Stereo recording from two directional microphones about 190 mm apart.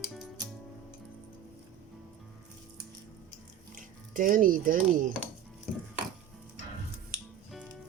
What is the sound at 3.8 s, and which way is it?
Speech, 45° right (ahead or behind).